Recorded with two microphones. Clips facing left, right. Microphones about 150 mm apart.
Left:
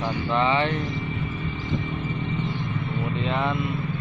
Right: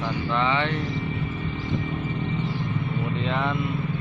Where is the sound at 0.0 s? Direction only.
20° left (ahead or behind).